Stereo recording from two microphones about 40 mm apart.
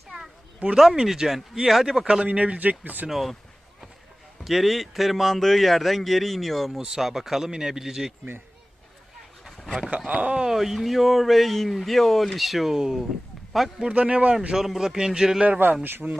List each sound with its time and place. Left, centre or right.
0.6 s speech: right
1.0 s speech: centre
2.2 s speech: right
3.1 s speech: centre
4.4 s speech: centre
7.0 s speech: centre
10.1 s speech: right
10.5 s speech: centre
12.7 s speech: centre
13.5 s speech: centre
13.8 s speech: right
14.5 s speech: centre
15.4 s speech: right
15.8 s speech: right